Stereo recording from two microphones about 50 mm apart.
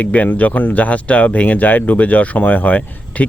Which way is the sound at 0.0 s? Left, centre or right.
Left.